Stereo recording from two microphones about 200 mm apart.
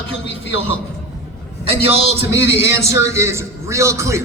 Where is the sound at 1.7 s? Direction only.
30° right (ahead or behind).